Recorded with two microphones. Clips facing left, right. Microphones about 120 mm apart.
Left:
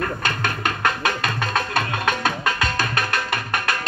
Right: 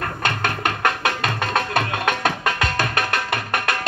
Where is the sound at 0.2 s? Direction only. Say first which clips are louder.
Right 2 dB; 60° right (ahead or behind).